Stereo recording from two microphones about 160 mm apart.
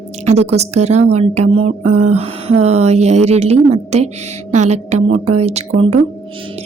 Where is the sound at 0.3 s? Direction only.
45° right (ahead or behind).